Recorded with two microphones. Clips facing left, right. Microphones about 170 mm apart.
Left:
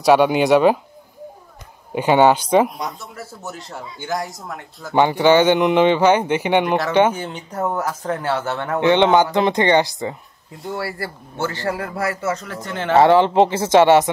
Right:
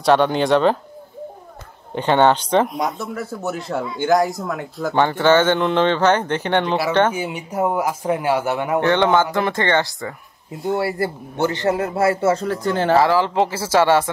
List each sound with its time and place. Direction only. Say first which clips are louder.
0.0 s speech: left 2 dB; 10° left (ahead or behind)
2.0 s speech: left 2 dB; 10° left (ahead or behind)
3.7 s speech: right 9 dB; 75° right (ahead or behind)
4.9 s speech: left 2 dB; 15° left (ahead or behind)
7.2 s speech: right 3 dB; 10° right (ahead or behind)
8.8 s speech: left 4 dB; 15° left (ahead or behind)
10.5 s a man's voice: right 6 dB; 20° right (ahead or behind)
12.9 s speech: left 5 dB; 30° left (ahead or behind)